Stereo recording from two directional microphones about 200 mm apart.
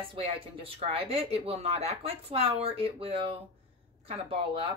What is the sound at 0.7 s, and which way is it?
Speech, 30° right (ahead or behind).